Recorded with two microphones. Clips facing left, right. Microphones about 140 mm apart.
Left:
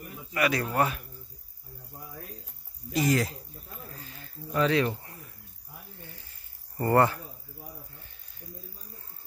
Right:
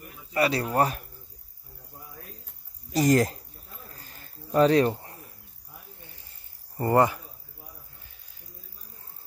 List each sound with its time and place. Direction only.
0.3 s a man's voice: 30° right (ahead or behind)
2.9 s speech: 40° right (ahead or behind)
4.0 s snake: 45° right (ahead or behind)
4.6 s speech: 35° right (ahead or behind)
6.8 s speech: 20° right (ahead or behind)